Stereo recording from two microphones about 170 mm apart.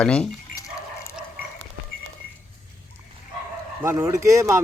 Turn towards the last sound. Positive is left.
turn(degrees=-20)  # may be behind; listen again after turning